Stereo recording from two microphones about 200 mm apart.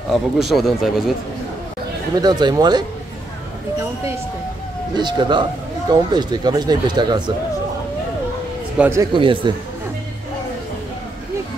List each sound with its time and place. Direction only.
0.1 s a man's voice: centre (ahead or behind)
2.1 s speech: 20° right (ahead or behind)
4.9 s speech: 20° right (ahead or behind)
8.7 s speech: 10° right (ahead or behind)